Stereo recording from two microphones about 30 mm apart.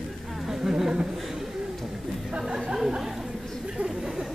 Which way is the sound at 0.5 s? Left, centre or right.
Centre.